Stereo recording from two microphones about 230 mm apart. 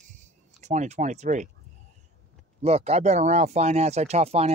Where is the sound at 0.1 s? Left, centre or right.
Right.